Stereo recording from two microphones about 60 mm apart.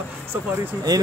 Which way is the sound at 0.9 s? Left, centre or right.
Right.